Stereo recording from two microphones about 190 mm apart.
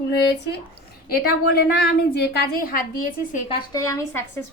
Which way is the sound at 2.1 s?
50° left (ahead or behind).